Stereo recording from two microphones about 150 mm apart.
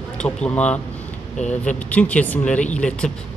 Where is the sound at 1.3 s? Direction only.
50° left (ahead or behind).